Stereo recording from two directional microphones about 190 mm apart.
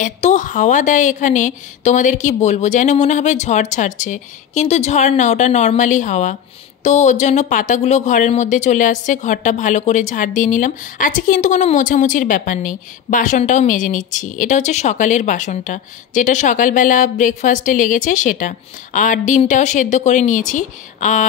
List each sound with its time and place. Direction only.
0.0 s a woman's voice: 40° left (ahead or behind)